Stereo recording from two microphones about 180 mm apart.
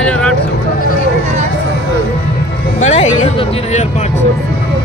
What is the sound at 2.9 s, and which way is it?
Speech, 40° left (ahead or behind).